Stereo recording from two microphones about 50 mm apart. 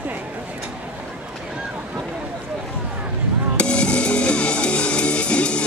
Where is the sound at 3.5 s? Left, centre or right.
Left.